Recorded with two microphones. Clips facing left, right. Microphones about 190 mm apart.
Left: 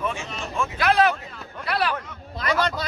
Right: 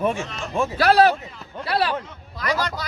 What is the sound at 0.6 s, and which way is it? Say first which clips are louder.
A man's voice: right 4 dB; 35° right (ahead or behind).